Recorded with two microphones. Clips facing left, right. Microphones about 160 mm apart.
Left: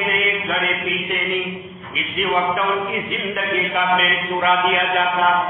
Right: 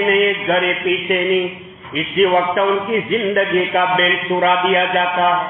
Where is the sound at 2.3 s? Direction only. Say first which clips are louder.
Right 5 dB; 55° right (ahead or behind).